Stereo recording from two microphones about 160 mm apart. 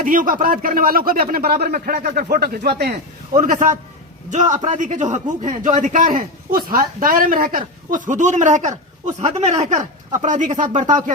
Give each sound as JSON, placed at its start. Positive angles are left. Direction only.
{"t": 0.0, "sound": "a man's voice", "side_deg": -60}